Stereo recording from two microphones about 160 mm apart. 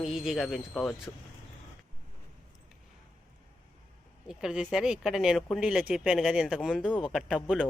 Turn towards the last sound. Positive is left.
turn(degrees=-5)  # may be behind; listen again after turning